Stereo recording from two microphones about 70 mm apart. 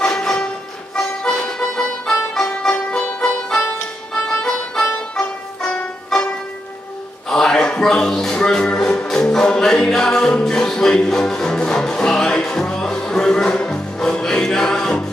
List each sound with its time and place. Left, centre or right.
0.0 s music: centre